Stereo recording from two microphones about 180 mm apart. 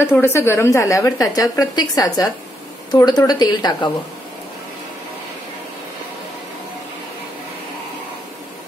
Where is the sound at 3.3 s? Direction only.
20° left (ahead or behind).